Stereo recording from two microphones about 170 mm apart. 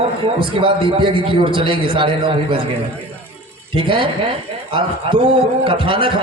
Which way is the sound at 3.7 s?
30° right (ahead or behind).